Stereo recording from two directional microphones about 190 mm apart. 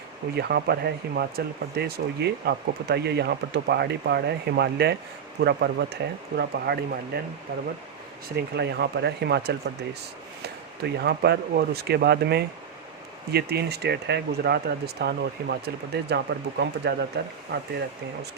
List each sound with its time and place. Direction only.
0.3 s speech: 55° right (ahead or behind)
8.4 s speech: 60° right (ahead or behind)
10.8 s speech: 60° right (ahead or behind)